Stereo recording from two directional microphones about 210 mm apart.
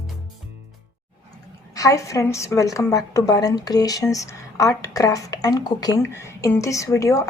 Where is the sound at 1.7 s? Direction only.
15° left (ahead or behind).